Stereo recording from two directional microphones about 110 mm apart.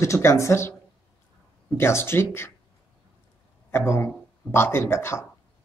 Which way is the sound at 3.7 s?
20° left (ahead or behind).